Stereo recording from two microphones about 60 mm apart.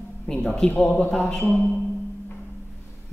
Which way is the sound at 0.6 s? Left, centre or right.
Left.